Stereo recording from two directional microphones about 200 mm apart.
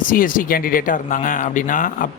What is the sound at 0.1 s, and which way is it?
Speech, 45° left (ahead or behind).